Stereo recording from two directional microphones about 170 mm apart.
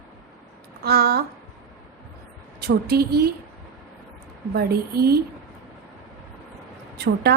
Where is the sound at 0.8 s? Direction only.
65° right (ahead or behind).